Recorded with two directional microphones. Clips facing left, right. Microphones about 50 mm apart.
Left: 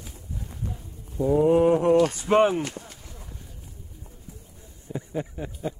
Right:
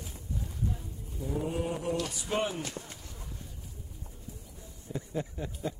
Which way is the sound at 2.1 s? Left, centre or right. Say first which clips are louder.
Left 12 dB; left.